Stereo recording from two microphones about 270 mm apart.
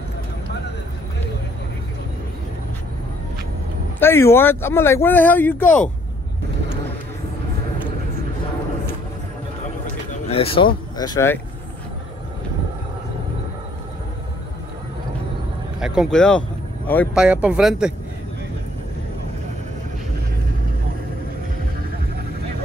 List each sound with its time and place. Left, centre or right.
4.0 s speech: centre
10.3 s speech: left
15.8 s speech: centre